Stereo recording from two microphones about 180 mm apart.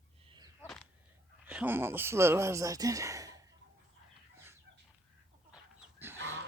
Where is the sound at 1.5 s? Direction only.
10° right (ahead or behind).